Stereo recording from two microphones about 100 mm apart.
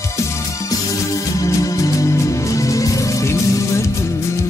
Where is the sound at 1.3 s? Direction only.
35° left (ahead or behind).